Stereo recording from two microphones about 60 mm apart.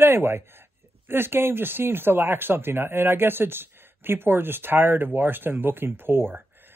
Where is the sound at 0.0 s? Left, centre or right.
Right.